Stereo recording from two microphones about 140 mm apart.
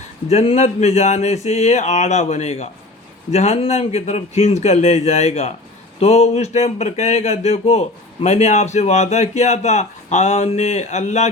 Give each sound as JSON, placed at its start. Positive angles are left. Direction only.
{"t": 0.3, "sound": "speech", "side_deg": 50}